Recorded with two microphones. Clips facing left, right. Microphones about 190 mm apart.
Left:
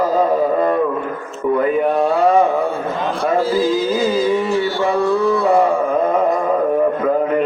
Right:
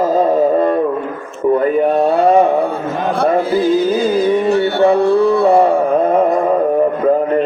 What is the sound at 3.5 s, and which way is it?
Music, 60° right (ahead or behind).